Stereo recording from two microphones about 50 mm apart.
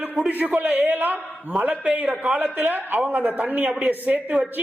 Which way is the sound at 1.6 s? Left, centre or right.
Right.